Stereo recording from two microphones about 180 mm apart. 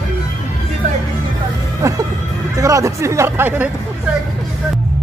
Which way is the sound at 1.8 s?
15° right (ahead or behind).